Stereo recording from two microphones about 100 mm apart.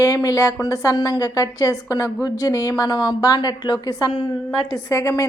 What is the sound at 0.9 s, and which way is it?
Speech, 50° left (ahead or behind).